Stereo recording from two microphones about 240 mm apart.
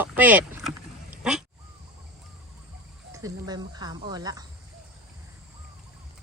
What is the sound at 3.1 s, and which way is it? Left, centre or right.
Speech, centre.